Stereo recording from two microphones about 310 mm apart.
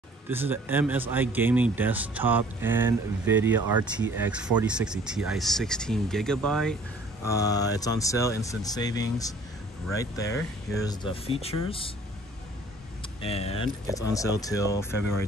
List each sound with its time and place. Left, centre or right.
0.3 s a man's voice: centre
13.2 s speech: centre